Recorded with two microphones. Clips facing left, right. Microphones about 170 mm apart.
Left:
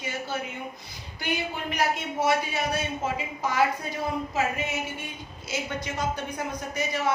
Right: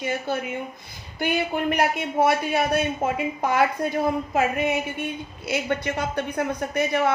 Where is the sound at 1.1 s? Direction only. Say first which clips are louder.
Right 7 dB; 55° right (ahead or behind).